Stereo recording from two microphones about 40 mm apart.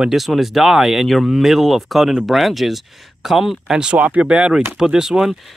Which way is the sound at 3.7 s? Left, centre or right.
Right.